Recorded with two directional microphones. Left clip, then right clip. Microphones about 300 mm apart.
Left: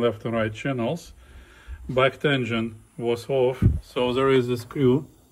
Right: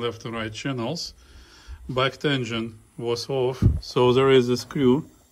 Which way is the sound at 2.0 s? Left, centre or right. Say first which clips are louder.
Left 3 dB; centre.